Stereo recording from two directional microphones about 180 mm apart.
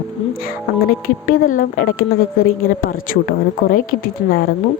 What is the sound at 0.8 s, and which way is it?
A woman's voice, 50° left (ahead or behind).